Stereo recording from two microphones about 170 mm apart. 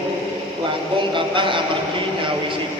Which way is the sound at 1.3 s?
30° right (ahead or behind).